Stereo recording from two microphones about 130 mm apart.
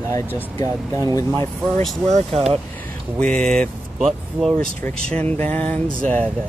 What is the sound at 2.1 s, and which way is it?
Speech, 60° right (ahead or behind).